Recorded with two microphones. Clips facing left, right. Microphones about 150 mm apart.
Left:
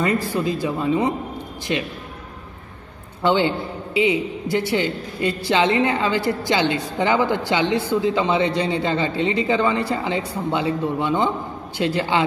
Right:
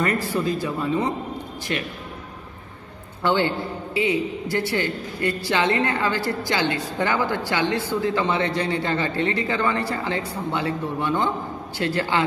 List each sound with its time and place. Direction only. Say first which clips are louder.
0.0 s a man's voice: left 2 dB; 15° left (ahead or behind)
3.2 s a man's voice: left 3 dB; 20° left (ahead or behind)